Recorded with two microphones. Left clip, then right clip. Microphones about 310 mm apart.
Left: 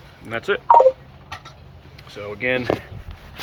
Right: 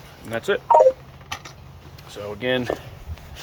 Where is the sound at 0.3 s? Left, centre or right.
Centre.